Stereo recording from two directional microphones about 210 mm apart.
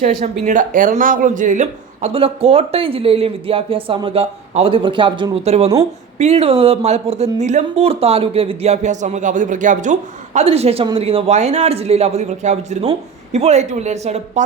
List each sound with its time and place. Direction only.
0.0 s speech: 35° right (ahead or behind)